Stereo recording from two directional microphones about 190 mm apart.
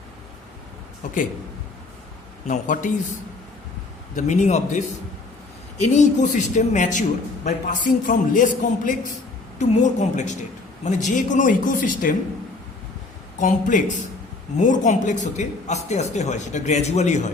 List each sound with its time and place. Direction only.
2.5 s speech: 40° left (ahead or behind)
4.1 s speech: 40° left (ahead or behind)
5.8 s a man's voice: 40° left (ahead or behind)
13.4 s speech: 40° left (ahead or behind)